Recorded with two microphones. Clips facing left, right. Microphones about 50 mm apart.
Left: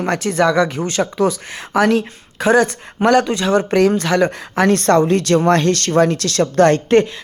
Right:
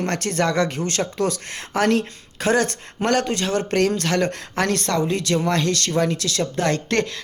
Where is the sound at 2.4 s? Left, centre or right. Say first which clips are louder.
Left 6 dB; left.